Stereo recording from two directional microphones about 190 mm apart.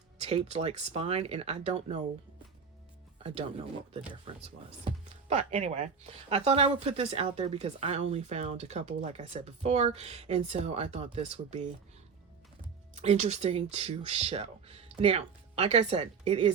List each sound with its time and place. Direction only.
0.2 s speech: 35° right (ahead or behind)
3.2 s speech: 30° right (ahead or behind)
4.9 s speech: 35° right (ahead or behind)
12.9 s speech: 35° right (ahead or behind)